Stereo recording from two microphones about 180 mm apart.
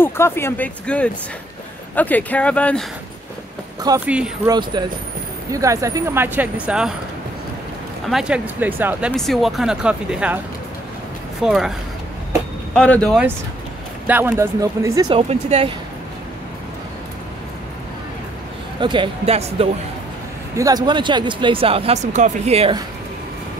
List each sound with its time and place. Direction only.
0.0 s speech: 15° left (ahead or behind)
4.0 s speech: 5° right (ahead or behind)
4.5 s speech: 25° right (ahead or behind); by 6.9 s 5° right (ahead or behind)
8.1 s speech: 5° right (ahead or behind)
9.1 s speech: centre (ahead or behind)
11.4 s speech: 5° right (ahead or behind)
12.7 s speech: 5° left (ahead or behind)
14.0 s speech: 10° right (ahead or behind); by 15.7 s 35° right (ahead or behind)
18.8 s speech: 25° right (ahead or behind)
20.5 s speech: 20° right (ahead or behind)